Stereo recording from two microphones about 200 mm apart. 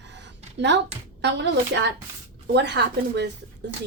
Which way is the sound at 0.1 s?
60° right (ahead or behind).